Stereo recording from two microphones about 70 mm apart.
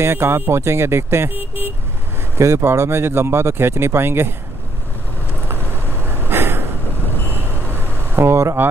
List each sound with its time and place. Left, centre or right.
0.0 s speech: right
2.3 s speech: right
6.0 s a sound: right
8.2 s speech: right